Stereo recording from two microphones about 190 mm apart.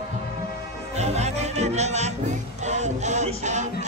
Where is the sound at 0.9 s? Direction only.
35° right (ahead or behind).